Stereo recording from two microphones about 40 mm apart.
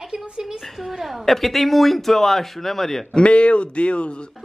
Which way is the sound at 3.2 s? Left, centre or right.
Left.